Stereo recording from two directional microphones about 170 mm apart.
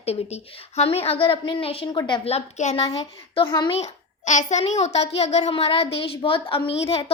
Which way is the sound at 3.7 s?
40° left (ahead or behind).